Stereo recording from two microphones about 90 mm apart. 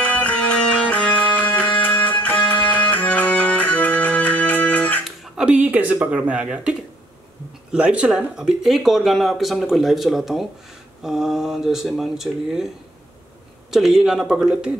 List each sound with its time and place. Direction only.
0.0 s music: 15° left (ahead or behind)
5.3 s speech: 15° right (ahead or behind)
13.7 s speech: 5° right (ahead or behind)